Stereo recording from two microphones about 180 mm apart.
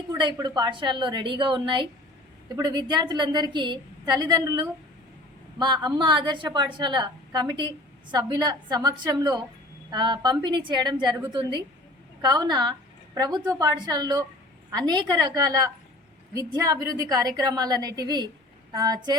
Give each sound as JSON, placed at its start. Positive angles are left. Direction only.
{"t": 0.1, "sound": "a woman's voice", "side_deg": -25}